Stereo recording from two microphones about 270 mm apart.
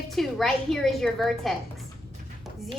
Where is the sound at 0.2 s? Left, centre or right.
Centre.